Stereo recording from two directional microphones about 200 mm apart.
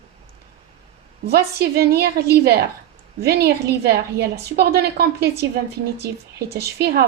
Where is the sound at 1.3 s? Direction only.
50° right (ahead or behind).